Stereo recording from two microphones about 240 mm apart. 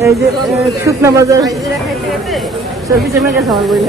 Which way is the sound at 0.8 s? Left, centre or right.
Centre.